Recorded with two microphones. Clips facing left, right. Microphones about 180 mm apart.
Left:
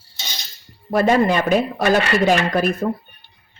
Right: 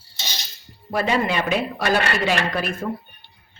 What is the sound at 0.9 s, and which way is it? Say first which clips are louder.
Speech: left 6 dB; 45° left (ahead or behind).